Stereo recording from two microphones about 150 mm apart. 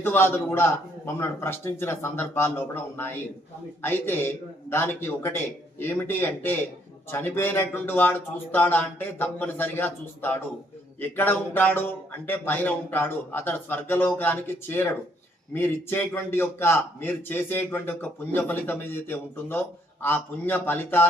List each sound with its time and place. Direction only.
0.0 s a man's voice: 15° left (ahead or behind)